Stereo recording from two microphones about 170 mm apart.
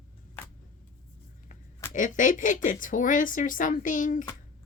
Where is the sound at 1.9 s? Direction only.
50° left (ahead or behind).